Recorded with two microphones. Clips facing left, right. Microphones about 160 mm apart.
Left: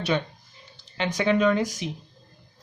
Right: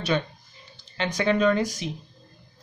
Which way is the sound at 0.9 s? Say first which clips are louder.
Left 1 dB; 15° left (ahead or behind).